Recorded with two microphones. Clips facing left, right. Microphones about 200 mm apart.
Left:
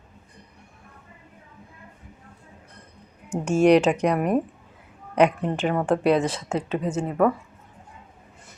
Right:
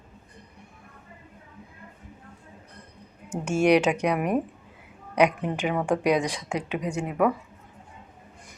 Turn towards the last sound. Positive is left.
turn(degrees=-15)  # may be behind; listen again after turning